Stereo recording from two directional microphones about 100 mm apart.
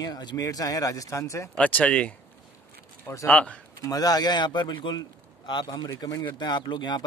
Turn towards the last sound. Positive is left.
turn(degrees=45)  # may be behind; listen again after turning